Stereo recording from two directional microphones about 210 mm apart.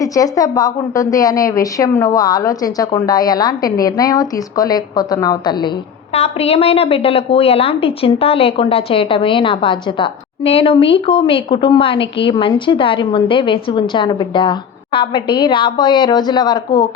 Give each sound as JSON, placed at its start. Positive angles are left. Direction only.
{"t": 0.0, "sound": "a woman's voice", "side_deg": 15}